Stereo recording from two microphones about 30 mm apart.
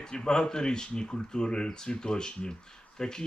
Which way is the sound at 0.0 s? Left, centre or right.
Left.